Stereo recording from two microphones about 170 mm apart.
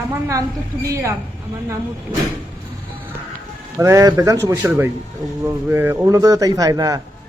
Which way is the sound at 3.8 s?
20° right (ahead or behind).